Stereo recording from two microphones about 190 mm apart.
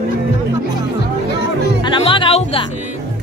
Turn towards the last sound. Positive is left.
turn(degrees=30)  # may be behind; listen again after turning